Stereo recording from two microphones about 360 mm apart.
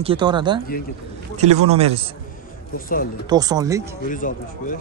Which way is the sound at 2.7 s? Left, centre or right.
Left.